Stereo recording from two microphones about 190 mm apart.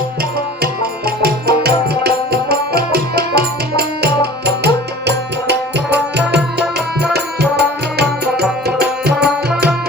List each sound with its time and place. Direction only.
0.2 s music: 55° right (ahead or behind)